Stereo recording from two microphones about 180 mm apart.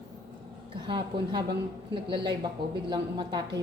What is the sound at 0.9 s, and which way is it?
Speech, 25° right (ahead or behind).